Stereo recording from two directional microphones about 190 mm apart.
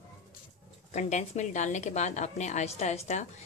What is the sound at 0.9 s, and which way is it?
Speech, 35° left (ahead or behind).